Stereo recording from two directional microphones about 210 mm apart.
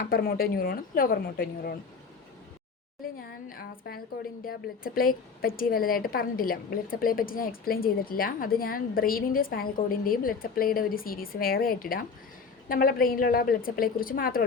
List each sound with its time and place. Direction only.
0.0 s a woman's voice: 45° left (ahead or behind)
3.2 s a woman's voice: 45° left (ahead or behind)